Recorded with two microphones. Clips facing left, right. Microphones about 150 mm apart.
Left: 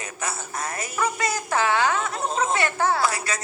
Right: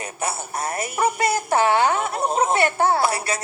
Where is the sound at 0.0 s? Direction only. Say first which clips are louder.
Right 4 dB; 30° right (ahead or behind).